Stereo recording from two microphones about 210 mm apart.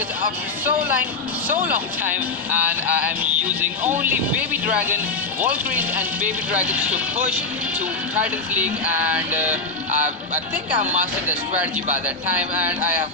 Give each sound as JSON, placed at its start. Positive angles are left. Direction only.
{"t": 1.6, "sound": "speech", "side_deg": -10}
{"t": 8.5, "sound": "speech", "side_deg": -5}
{"t": 10.8, "sound": "speech", "side_deg": -35}